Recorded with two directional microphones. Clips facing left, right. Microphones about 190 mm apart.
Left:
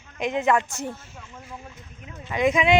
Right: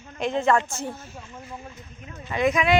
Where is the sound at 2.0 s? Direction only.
15° left (ahead or behind).